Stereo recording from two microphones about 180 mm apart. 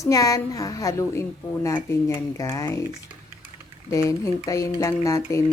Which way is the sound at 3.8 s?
20° left (ahead or behind).